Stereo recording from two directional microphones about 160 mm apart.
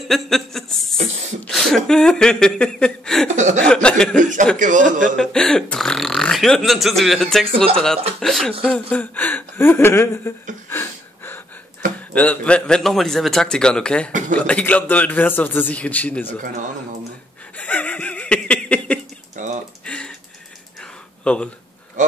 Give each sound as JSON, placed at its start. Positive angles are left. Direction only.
{"t": 0.1, "sound": "a man's voice", "side_deg": 0}
{"t": 4.2, "sound": "a man's voice", "side_deg": -55}
{"t": 5.1, "sound": "a man's voice", "side_deg": 5}
{"t": 10.7, "sound": "a sound", "side_deg": 15}
{"t": 12.1, "sound": "a man's voice", "side_deg": 10}
{"t": 17.6, "sound": "laughter", "side_deg": 10}
{"t": 19.3, "sound": "typing", "side_deg": -50}
{"t": 21.2, "sound": "speech", "side_deg": 5}